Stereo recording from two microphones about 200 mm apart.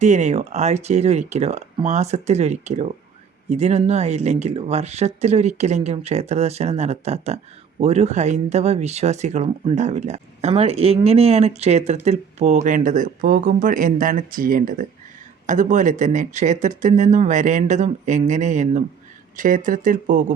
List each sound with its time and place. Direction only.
0.0 s speech: 35° right (ahead or behind)